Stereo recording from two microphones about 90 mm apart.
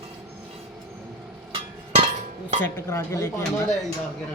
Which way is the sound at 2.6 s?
25° left (ahead or behind).